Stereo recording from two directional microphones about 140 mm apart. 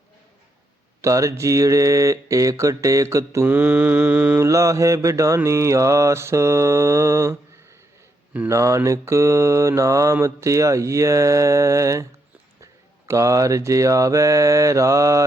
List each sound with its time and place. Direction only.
1.0 s mantra: 20° right (ahead or behind)
8.4 s mantra: 20° right (ahead or behind)
13.1 s mantra: 20° right (ahead or behind)